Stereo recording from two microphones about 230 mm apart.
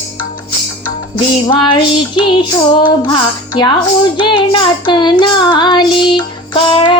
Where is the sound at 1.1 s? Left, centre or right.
Centre.